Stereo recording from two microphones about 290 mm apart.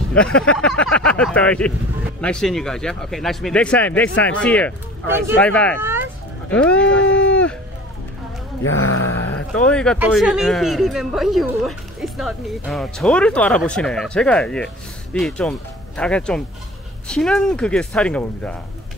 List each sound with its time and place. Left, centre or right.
0.1 s speech: centre
5.8 s a sound: centre
6.5 s speech: centre
7.1 s speech: left
8.6 s a sound: left
9.6 s speech: centre